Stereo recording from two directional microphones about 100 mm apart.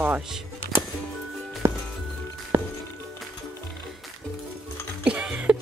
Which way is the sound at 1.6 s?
25° right (ahead or behind).